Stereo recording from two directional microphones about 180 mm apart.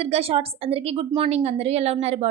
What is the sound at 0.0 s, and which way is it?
A woman's voice, 35° right (ahead or behind).